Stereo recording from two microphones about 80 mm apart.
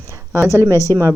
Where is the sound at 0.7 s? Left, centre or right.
Left.